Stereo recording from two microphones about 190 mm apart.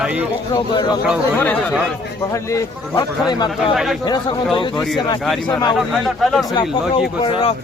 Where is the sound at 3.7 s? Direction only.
Centre (ahead or behind).